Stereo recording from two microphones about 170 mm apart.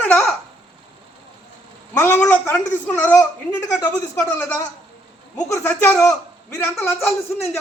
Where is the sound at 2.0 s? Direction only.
10° left (ahead or behind).